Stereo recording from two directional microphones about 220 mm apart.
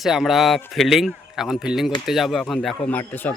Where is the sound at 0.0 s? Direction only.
Centre (ahead or behind).